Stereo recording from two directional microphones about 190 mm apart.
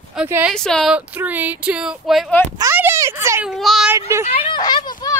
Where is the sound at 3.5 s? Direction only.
Centre (ahead or behind).